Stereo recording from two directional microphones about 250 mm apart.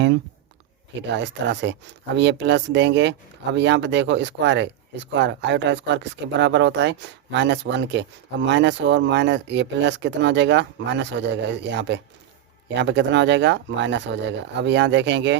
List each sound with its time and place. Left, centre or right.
1.1 s speech: right